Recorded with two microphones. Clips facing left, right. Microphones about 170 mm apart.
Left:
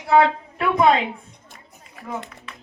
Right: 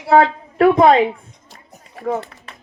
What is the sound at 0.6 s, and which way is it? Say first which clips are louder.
Speech: right 8 dB; 55° right (ahead or behind).